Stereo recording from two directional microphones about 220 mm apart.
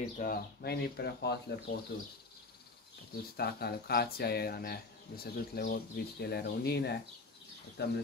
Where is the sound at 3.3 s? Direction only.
45° left (ahead or behind).